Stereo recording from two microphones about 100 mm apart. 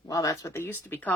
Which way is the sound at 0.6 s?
20° left (ahead or behind).